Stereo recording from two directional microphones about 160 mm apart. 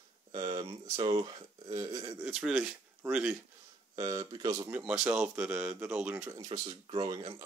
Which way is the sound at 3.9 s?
25° right (ahead or behind).